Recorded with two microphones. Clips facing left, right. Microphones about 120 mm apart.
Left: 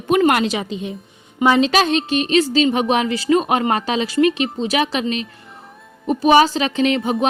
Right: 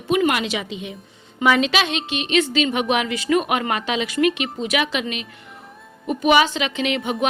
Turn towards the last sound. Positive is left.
turn(degrees=35)  # may be behind; listen again after turning